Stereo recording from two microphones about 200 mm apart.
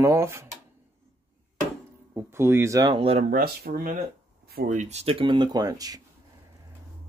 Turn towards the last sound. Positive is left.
turn(degrees=-20)  # may be behind; listen again after turning